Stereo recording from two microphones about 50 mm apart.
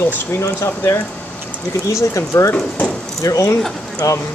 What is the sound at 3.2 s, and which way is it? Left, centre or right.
Speech, left.